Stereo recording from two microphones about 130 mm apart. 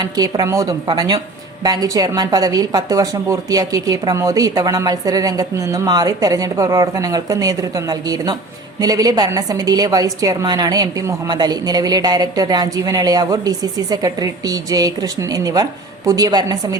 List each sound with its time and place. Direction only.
0.0 s a woman's voice: 30° right (ahead or behind)